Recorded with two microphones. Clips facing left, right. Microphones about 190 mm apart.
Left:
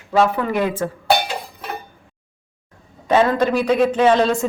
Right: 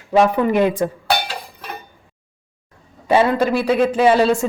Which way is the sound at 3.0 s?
10° right (ahead or behind).